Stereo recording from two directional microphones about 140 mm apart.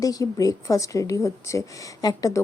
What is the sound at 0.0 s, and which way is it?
A woman's voice, 25° left (ahead or behind).